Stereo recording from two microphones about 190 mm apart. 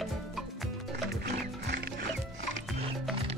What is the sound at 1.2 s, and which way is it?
Music, 60° right (ahead or behind).